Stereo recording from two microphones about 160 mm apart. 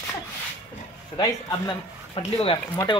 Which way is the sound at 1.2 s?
25° left (ahead or behind).